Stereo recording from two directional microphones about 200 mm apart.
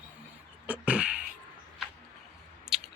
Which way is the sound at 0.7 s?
5° right (ahead or behind).